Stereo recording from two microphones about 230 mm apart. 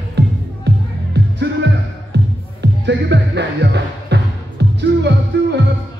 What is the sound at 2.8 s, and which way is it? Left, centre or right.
Music, right.